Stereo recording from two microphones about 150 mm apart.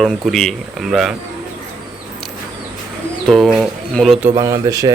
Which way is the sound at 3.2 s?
Centre (ahead or behind).